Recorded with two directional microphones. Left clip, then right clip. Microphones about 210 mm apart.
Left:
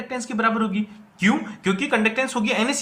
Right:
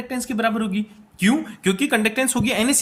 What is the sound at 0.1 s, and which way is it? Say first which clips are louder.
Speech: left 1 dB; 45° right (ahead or behind).